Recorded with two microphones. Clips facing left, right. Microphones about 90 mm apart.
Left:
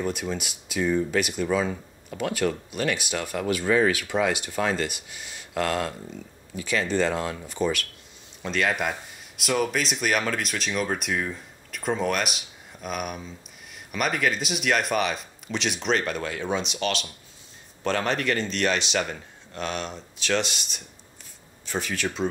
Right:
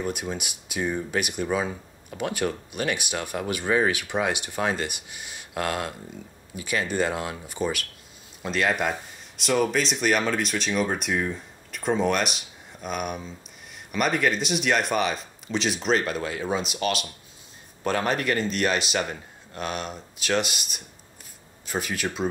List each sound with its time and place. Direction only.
0.0 s speech: 15° right (ahead or behind)